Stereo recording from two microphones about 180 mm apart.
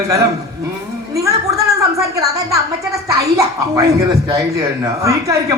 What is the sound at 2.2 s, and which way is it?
A woman's voice, 20° right (ahead or behind).